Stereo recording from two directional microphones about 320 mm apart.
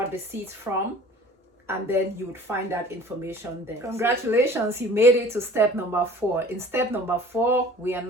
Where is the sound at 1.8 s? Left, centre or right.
Centre.